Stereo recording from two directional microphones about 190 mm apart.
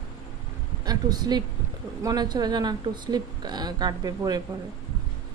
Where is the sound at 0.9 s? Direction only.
20° right (ahead or behind).